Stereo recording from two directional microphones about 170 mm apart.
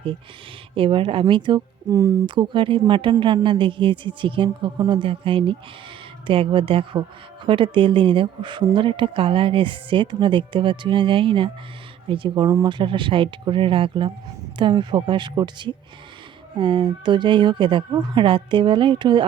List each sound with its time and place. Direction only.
0.8 s speech: 30° right (ahead or behind)